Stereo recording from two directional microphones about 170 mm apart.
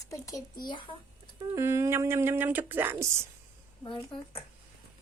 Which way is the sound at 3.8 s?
30° left (ahead or behind).